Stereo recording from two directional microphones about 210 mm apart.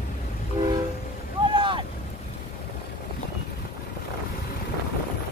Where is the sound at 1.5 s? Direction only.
25° right (ahead or behind).